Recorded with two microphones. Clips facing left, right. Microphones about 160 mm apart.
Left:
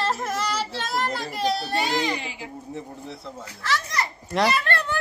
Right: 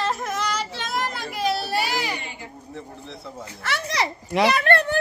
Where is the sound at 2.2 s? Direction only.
90° left.